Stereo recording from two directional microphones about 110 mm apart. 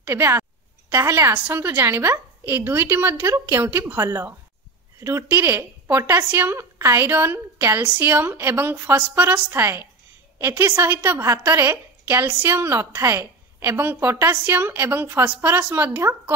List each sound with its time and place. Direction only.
0.0 s a woman's voice: 25° right (ahead or behind)